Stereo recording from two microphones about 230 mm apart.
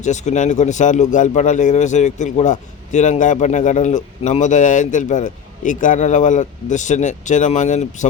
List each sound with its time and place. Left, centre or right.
0.0 s speech: left